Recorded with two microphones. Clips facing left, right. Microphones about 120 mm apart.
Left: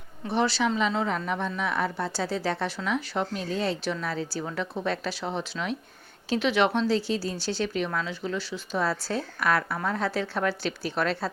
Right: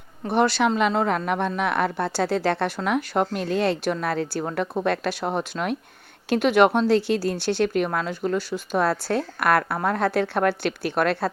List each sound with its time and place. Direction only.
0.3 s a woman's voice: 55° right (ahead or behind)